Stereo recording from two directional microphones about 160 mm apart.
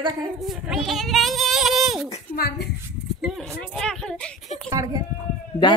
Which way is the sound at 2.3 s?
85° left.